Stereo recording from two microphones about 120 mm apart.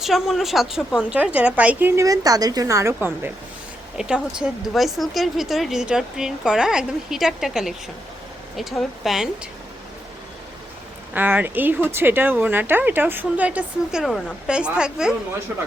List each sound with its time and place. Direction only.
0.0 s speech: centre (ahead or behind)
2.0 s a woman's voice: 30° right (ahead or behind)
3.9 s speech: 5° right (ahead or behind)
9.0 s speech: 5° right (ahead or behind)
11.1 s speech: 15° right (ahead or behind)